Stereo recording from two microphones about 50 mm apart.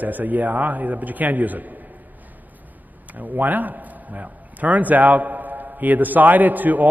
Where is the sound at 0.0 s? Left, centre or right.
Right.